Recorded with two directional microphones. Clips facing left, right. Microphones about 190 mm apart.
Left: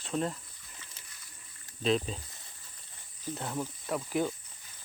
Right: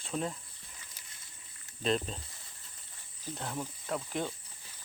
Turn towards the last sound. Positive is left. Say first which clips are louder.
# left 4 dB
turn(degrees=5)  # may be behind; listen again after turning